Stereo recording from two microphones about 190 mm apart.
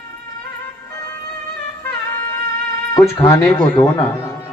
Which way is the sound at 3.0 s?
15° left (ahead or behind).